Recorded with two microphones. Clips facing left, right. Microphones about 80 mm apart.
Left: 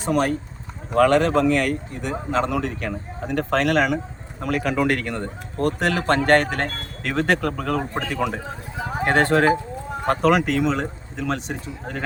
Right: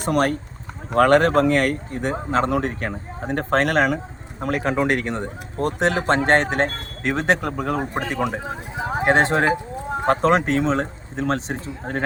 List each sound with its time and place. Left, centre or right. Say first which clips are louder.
0.0 s speech: right 1 dB; right